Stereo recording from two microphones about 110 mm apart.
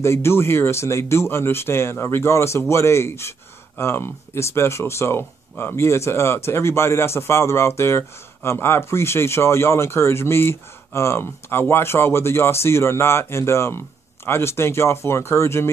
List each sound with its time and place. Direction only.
0.0 s speech: 25° left (ahead or behind)